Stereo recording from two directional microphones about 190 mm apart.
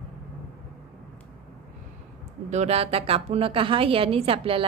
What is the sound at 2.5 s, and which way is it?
A woman's voice, 35° right (ahead or behind).